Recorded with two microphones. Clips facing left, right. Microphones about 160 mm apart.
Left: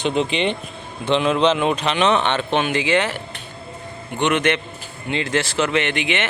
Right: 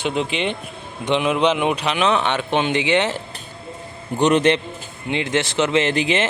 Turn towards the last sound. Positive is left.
turn(degrees=-30)  # may be behind; listen again after turning